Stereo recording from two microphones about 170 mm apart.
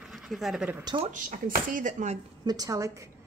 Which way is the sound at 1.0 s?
50° right (ahead or behind).